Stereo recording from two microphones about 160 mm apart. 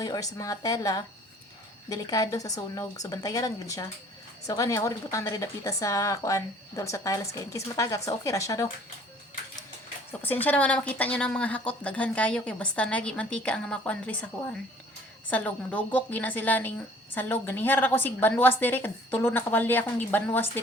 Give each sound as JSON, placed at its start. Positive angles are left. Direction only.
{"t": 0.0, "sound": "speech", "side_deg": 20}
{"t": 10.4, "sound": "a woman's voice", "side_deg": 10}
{"t": 15.3, "sound": "a woman's voice", "side_deg": 10}